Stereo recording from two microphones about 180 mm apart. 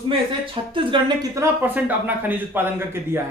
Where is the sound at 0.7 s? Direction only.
30° right (ahead or behind).